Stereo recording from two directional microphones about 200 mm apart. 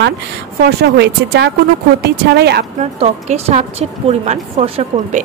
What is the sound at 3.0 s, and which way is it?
A woman's voice, 35° right (ahead or behind).